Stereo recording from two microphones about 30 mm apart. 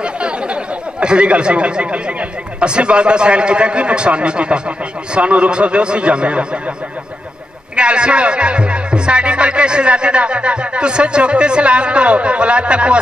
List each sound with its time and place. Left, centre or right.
0.0 s chatter: right
2.6 s a man's voice: right
7.7 s speech: right